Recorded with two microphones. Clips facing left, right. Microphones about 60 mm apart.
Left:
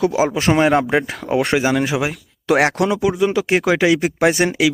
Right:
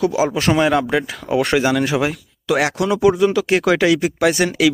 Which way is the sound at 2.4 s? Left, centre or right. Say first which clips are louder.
Left 3 dB; left.